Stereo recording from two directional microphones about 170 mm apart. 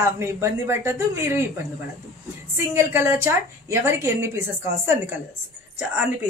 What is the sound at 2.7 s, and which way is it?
A woman's voice, 15° right (ahead or behind).